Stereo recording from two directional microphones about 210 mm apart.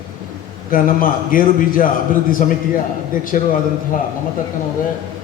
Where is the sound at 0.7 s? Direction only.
40° left (ahead or behind).